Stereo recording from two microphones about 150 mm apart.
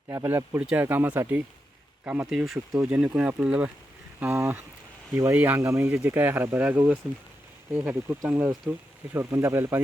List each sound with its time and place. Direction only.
0.1 s speech: 20° right (ahead or behind)